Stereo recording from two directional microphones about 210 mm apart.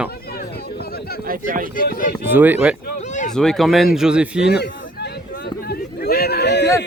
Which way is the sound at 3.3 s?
5° left (ahead or behind).